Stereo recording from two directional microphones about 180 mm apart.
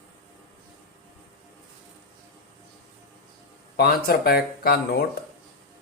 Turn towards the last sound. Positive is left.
turn(degrees=60)  # may be behind; listen again after turning